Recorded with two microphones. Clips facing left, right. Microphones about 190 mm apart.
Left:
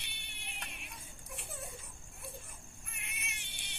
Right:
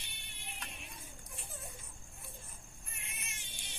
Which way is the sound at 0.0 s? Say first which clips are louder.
Even; 65° left (ahead or behind).